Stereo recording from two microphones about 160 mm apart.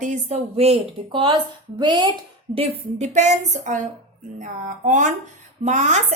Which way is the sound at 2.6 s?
45° right (ahead or behind).